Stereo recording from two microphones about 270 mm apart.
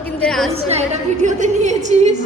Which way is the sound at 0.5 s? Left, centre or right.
Right.